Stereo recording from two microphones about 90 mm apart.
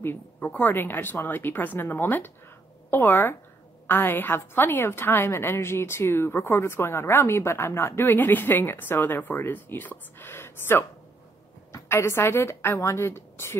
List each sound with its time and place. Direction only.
0.0 s a woman's voice: 20° left (ahead or behind)